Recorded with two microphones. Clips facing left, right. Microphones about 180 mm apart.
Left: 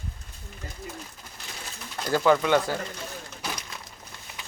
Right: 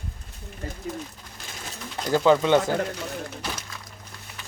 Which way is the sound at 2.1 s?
15° right (ahead or behind).